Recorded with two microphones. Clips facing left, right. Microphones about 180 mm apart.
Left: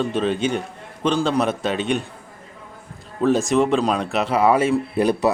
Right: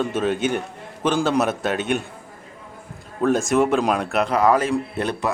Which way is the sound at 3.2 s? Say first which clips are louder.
Left 1 dB; centre (ahead or behind).